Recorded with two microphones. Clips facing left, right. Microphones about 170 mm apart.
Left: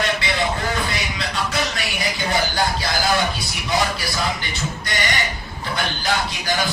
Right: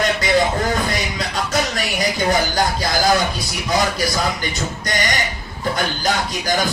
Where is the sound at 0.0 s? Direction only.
45° right (ahead or behind).